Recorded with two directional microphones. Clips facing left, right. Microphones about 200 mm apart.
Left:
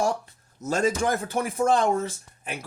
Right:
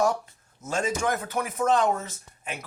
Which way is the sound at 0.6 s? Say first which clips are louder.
Left 3 dB; 40° left (ahead or behind).